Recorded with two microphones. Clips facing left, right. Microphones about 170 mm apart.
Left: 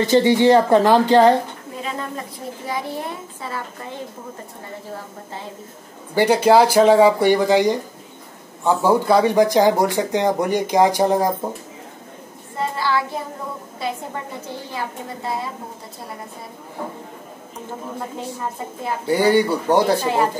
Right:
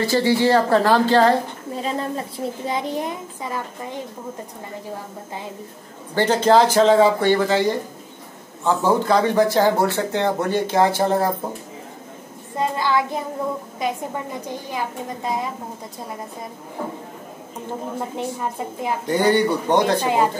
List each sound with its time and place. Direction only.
0.0 s a woman's voice: 20° left (ahead or behind)
1.8 s a woman's voice: 35° right (ahead or behind); by 4.0 s 15° right (ahead or behind)
6.1 s speech: 10° left (ahead or behind)
12.5 s a child's voice: 20° right (ahead or behind)
19.0 s speech: 10° left (ahead or behind)
20.0 s a woman's voice: 10° right (ahead or behind)